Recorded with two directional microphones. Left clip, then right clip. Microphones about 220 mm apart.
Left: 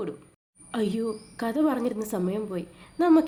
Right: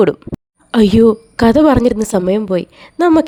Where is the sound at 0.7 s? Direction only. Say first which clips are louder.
Right 19 dB; 45° right (ahead or behind).